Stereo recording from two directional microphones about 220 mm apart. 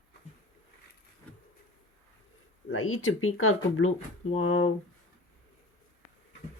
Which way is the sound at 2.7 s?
65° left (ahead or behind).